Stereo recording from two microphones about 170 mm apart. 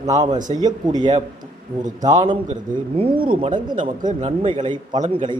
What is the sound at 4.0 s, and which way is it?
Speech, 50° right (ahead or behind).